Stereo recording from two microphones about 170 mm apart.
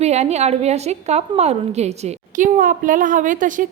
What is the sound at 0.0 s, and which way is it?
A woman's voice, 40° right (ahead or behind).